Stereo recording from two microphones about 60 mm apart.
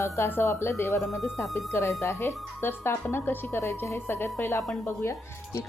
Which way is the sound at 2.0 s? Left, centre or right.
Left.